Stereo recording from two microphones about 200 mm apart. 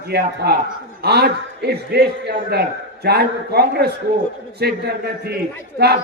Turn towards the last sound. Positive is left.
turn(degrees=-55)  # may be behind; listen again after turning